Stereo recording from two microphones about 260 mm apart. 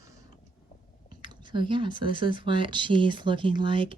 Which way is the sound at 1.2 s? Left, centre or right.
Centre.